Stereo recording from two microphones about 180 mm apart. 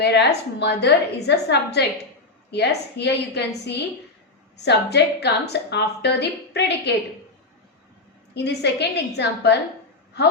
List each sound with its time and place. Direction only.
0.0 s a woman's voice: 65° left (ahead or behind)
8.4 s a woman's voice: 70° left (ahead or behind)